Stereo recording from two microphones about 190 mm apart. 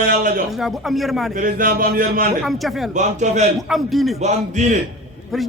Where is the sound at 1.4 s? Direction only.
45° right (ahead or behind).